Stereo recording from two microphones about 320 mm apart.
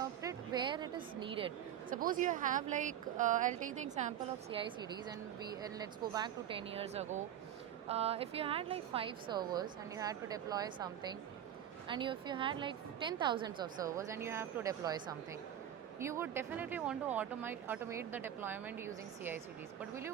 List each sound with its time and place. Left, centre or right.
0.0 s a woman's voice: centre
11.9 s speech: centre